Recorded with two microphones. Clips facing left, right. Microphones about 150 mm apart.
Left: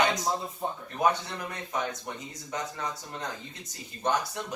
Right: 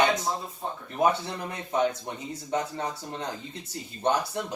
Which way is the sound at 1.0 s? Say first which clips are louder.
Right 2 dB; 30° right (ahead or behind).